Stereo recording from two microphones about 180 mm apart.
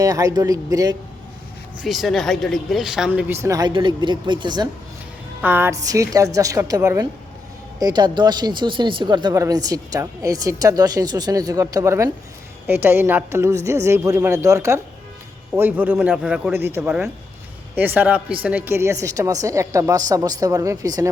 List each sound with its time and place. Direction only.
0.0 s speech: 20° right (ahead or behind)
1.8 s speech: centre (ahead or behind); by 4.7 s 25° right (ahead or behind)
5.4 s speech: 10° right (ahead or behind)